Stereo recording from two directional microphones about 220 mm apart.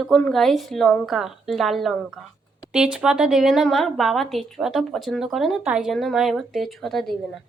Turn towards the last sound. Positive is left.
turn(degrees=0)  # may be behind; listen again after turning